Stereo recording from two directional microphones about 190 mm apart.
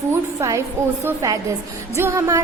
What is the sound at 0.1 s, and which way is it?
A woman's voice, 15° right (ahead or behind).